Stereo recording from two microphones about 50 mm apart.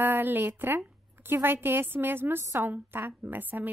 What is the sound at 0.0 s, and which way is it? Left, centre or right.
A woman's voice, right.